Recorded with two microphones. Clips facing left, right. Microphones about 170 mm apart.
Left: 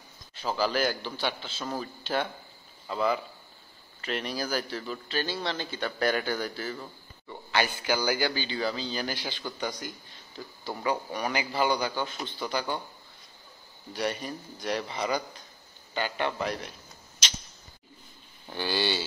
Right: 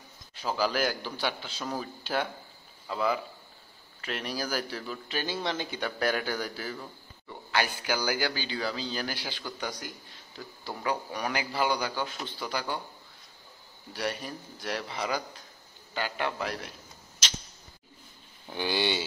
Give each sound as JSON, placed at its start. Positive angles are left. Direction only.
{"t": 0.4, "sound": "a man's voice", "side_deg": -10}
{"t": 10.3, "sound": "a man's voice", "side_deg": 5}
{"t": 13.9, "sound": "a man's voice", "side_deg": -5}
{"t": 18.6, "sound": "a man's voice", "side_deg": -15}